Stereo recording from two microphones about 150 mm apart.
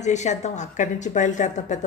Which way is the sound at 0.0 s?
50° left (ahead or behind).